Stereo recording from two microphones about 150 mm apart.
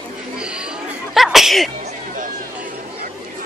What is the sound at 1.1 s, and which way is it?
Sneeze, centre (ahead or behind).